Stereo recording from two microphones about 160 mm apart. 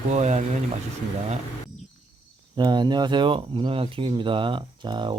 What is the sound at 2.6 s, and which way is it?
Speech, 25° right (ahead or behind).